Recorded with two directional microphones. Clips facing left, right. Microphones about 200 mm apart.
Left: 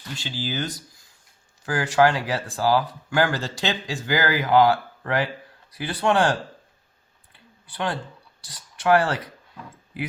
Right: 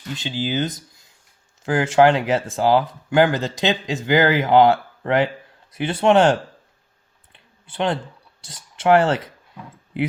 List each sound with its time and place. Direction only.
0.2 s speech: 20° right (ahead or behind)
7.3 s clicking: 20° right (ahead or behind)
8.4 s speech: 25° right (ahead or behind)